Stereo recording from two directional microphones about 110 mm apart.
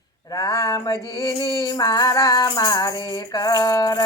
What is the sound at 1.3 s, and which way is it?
Music, 35° left (ahead or behind).